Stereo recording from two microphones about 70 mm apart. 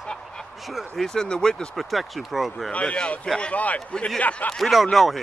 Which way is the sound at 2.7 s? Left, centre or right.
Centre.